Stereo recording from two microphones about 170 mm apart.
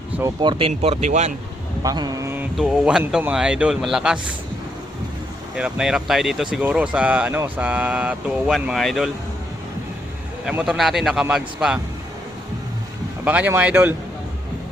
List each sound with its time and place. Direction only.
0.2 s speech: 25° right (ahead or behind)
0.7 s speech: 40° right (ahead or behind)
1.8 s a sound: 20° right (ahead or behind)
2.6 s speech: 5° right (ahead or behind)
5.5 s speech: 5° right (ahead or behind)
10.4 s speech: 5° right (ahead or behind)
13.2 s speech: 10° right (ahead or behind)